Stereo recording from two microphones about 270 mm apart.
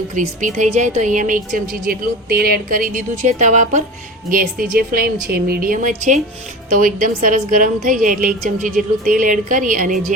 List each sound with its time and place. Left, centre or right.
0.1 s a woman's voice: right